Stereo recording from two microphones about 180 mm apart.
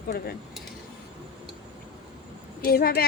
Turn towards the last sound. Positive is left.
turn(degrees=60)  # may be behind; listen again after turning